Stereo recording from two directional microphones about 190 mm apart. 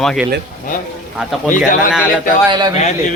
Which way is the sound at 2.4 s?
20° right (ahead or behind).